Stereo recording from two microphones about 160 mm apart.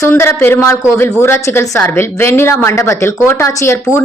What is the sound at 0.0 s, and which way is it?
A woman's voice, 15° left (ahead or behind).